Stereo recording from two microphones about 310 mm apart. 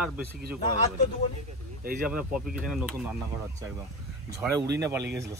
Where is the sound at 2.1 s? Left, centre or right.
Centre.